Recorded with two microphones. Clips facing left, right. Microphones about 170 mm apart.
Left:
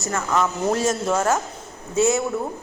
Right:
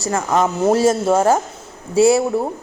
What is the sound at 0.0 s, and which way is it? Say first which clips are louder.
A woman's voice: right 5 dB; 35° right (ahead or behind).